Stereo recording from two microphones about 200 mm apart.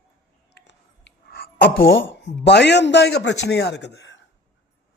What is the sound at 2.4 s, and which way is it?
A man's voice, 60° left (ahead or behind).